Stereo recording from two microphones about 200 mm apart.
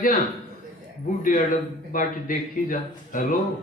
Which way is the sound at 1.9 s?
40° left (ahead or behind).